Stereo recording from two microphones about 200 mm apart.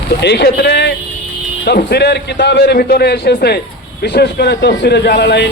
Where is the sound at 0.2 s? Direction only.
55° left (ahead or behind).